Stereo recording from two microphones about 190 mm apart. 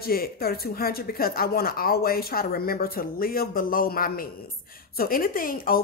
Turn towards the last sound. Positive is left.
turn(degrees=50)  # may be behind; listen again after turning